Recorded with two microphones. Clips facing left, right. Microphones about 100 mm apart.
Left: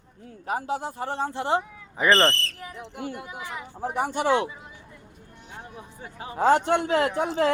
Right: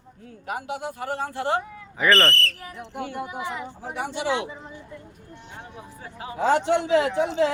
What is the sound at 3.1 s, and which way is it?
Speech, 25° right (ahead or behind).